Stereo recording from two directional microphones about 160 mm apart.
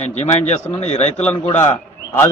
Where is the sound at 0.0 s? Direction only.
45° left (ahead or behind).